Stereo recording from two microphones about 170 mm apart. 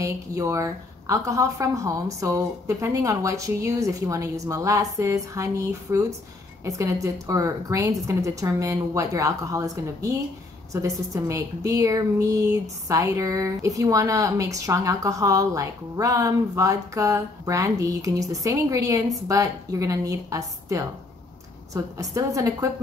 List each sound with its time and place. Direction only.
0.0 s a woman's voice: 20° right (ahead or behind)